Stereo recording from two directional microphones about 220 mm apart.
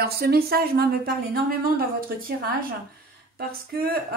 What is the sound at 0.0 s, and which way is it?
A woman's voice, 45° right (ahead or behind).